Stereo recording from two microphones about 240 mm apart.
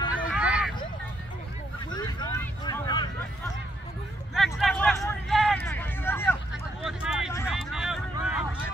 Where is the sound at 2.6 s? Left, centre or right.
Centre.